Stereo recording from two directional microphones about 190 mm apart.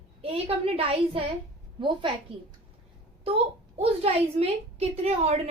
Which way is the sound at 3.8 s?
30° right (ahead or behind).